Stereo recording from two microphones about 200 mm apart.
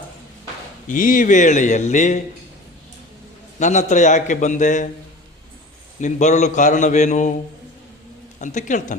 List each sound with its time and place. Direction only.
0.9 s a man's voice: 45° left (ahead or behind)
3.6 s a man's voice: 35° left (ahead or behind)
6.0 s a man's voice: 35° left (ahead or behind)
8.4 s a man's voice: 40° left (ahead or behind)